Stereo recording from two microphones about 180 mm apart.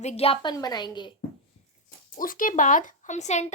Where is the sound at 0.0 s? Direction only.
35° left (ahead or behind).